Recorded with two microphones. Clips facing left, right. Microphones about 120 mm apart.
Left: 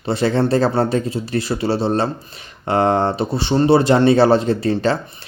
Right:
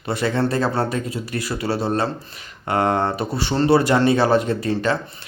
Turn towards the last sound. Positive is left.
turn(degrees=30)  # may be behind; listen again after turning